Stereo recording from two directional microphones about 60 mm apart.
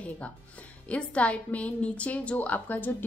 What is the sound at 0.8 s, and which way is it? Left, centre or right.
Speech, left.